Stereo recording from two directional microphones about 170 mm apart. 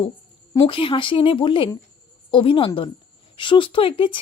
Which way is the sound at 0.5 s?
30° left (ahead or behind).